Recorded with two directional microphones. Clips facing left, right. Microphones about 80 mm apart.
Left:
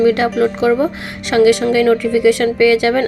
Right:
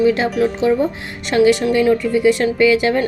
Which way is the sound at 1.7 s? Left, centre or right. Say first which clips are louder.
Left 2 dB; left.